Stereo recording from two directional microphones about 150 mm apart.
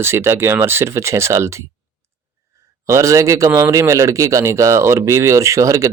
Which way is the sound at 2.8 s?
20° right (ahead or behind).